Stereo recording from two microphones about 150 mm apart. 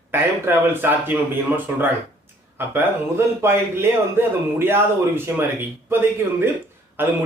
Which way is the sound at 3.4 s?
15° right (ahead or behind).